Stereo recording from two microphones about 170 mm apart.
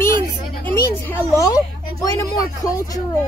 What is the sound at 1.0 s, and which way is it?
A child's voice, 15° left (ahead or behind).